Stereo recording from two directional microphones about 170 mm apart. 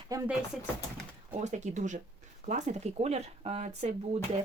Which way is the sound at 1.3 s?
45° right (ahead or behind).